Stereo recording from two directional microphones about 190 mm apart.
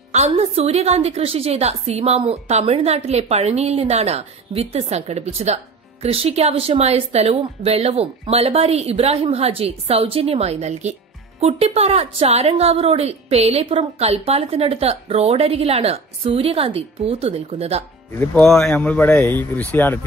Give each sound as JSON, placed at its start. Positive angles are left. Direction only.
{"t": 0.1, "sound": "a woman's voice", "side_deg": -35}
{"t": 18.3, "sound": "speech", "side_deg": 5}